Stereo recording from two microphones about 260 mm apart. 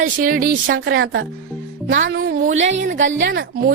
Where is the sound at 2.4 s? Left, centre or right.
Right.